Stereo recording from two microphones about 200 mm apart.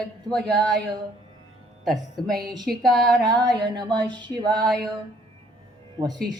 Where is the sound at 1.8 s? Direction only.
Centre (ahead or behind).